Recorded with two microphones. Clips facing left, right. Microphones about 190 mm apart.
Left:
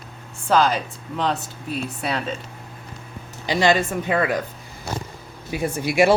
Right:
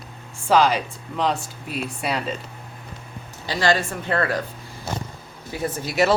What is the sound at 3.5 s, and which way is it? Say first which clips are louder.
Speech: left 3 dB; 20° left (ahead or behind).